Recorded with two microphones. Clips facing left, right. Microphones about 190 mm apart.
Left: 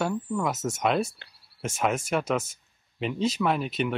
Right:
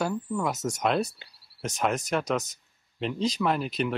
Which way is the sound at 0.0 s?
Centre (ahead or behind).